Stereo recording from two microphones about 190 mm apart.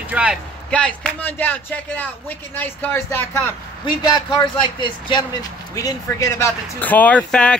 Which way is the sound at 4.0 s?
25° left (ahead or behind).